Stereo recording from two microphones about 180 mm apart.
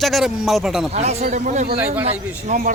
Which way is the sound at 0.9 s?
35° right (ahead or behind).